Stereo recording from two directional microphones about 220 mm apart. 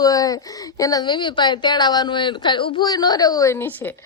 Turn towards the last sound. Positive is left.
turn(degrees=10)  # may be behind; listen again after turning